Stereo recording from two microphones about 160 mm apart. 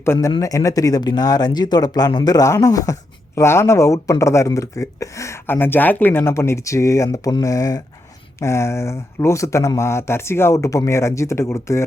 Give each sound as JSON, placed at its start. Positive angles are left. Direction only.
{"t": 0.0, "sound": "speech", "side_deg": 15}